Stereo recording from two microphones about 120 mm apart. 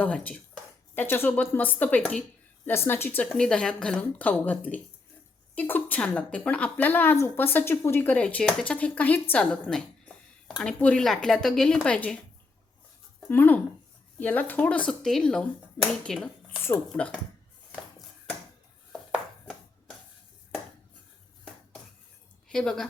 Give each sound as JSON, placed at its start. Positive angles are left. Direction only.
{"t": 0.0, "sound": "speech", "side_deg": 10}
{"t": 3.3, "sound": "speech", "side_deg": 5}
{"t": 13.2, "sound": "speech", "side_deg": 15}
{"t": 18.9, "sound": "chopping", "side_deg": 5}
{"t": 22.4, "sound": "speech", "side_deg": 5}